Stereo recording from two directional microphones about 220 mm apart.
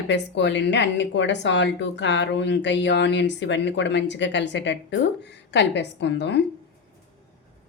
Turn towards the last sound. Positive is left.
turn(degrees=55)  # may be behind; listen again after turning